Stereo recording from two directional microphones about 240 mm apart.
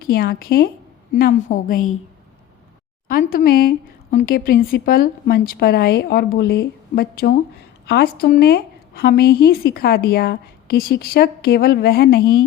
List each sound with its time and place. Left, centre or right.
0.0 s a woman's voice: left
3.1 s a woman's voice: left